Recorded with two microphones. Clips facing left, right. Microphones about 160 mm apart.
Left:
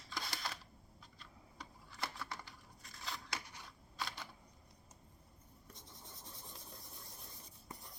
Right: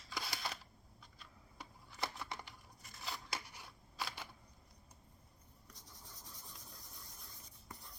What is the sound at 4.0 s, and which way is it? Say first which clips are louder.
Camera: even; 5° right (ahead or behind).